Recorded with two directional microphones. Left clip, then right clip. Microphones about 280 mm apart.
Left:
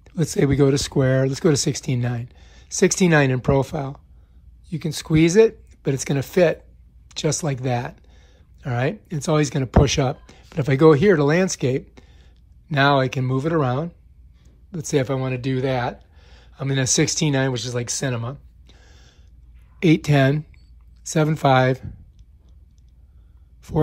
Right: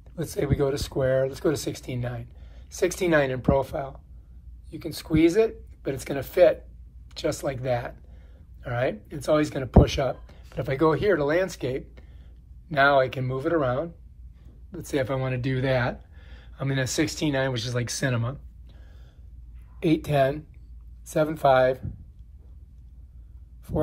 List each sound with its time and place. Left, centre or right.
0.0 s speech: left